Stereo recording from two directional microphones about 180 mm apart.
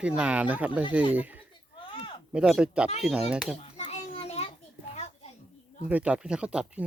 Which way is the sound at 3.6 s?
35° left (ahead or behind).